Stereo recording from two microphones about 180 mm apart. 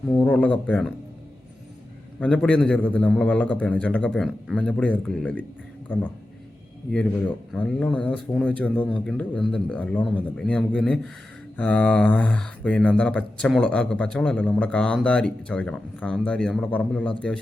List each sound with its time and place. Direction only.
0.1 s a man's voice: 10° left (ahead or behind)
2.2 s a man's voice: 5° left (ahead or behind)
6.9 s a man's voice: 5° left (ahead or behind)